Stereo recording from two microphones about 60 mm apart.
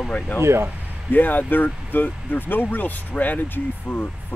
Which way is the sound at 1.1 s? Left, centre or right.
Left.